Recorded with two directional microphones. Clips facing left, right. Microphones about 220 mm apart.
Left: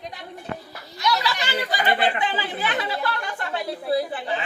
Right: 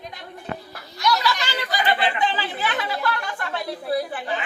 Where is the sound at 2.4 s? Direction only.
20° left (ahead or behind).